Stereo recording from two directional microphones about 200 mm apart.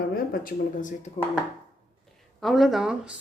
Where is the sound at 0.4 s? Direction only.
40° left (ahead or behind).